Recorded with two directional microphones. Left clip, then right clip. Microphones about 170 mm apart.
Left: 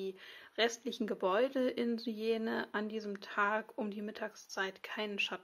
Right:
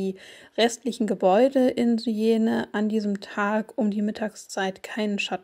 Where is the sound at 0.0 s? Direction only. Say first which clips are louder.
Right 11 dB; 25° right (ahead or behind).